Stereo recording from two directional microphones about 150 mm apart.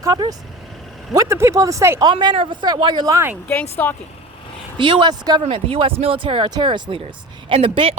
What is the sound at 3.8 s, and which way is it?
Speech, 10° left (ahead or behind).